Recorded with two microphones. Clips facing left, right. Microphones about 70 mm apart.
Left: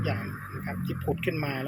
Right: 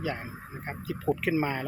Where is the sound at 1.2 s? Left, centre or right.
Right.